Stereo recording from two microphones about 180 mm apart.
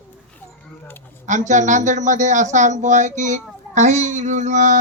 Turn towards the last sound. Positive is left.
turn(degrees=-40)  # may be behind; listen again after turning